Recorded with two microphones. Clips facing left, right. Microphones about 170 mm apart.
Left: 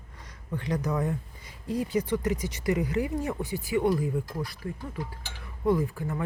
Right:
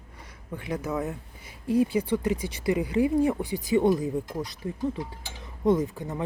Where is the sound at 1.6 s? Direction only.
25° right (ahead or behind).